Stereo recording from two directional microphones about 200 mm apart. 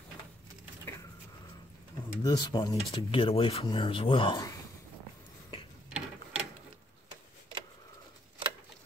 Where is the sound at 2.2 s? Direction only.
20° left (ahead or behind).